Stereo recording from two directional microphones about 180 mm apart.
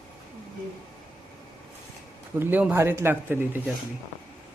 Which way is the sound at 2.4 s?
10° right (ahead or behind).